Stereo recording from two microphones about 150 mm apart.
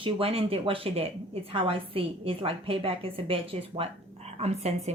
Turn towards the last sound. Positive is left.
turn(degrees=-45)  # may be behind; listen again after turning